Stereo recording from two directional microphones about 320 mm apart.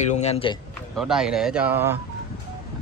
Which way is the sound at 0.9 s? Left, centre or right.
Centre.